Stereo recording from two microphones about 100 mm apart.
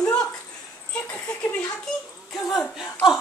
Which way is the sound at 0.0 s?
10° left (ahead or behind).